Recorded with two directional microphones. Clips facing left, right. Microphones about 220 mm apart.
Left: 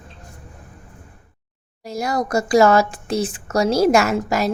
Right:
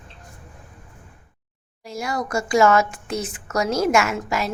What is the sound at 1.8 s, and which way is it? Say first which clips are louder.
Speech: left 4 dB; 40° left (ahead or behind).